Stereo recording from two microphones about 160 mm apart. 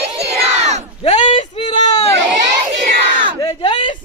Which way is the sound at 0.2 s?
40° right (ahead or behind).